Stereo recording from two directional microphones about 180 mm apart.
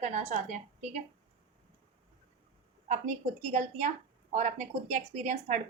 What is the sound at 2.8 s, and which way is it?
A woman's voice, 40° right (ahead or behind).